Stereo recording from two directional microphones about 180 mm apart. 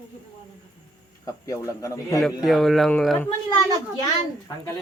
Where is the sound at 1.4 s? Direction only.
15° left (ahead or behind).